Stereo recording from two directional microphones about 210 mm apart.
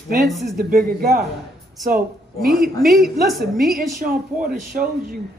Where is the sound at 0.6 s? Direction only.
45° right (ahead or behind).